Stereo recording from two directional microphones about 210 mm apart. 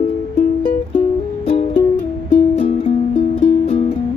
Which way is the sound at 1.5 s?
30° left (ahead or behind).